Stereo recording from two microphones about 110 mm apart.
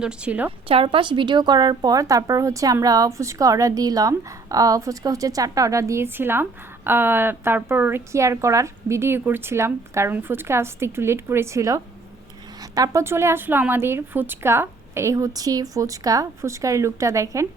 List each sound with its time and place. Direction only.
0.0 s a woman's voice: 10° right (ahead or behind)
0.7 s a woman's voice: 55° right (ahead or behind); by 17.2 s 30° right (ahead or behind)